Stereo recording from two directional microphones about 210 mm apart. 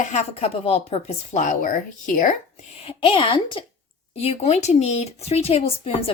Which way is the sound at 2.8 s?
25° left (ahead or behind).